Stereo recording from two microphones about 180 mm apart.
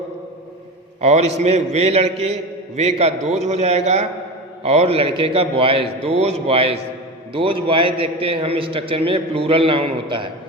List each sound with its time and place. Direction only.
1.0 s a man's voice: 35° right (ahead or behind)